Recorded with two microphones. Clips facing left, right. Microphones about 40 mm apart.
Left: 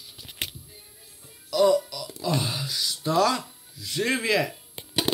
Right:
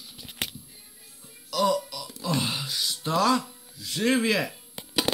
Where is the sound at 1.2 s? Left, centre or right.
Centre.